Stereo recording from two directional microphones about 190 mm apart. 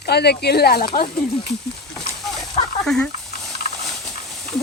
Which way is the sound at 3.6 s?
50° left (ahead or behind).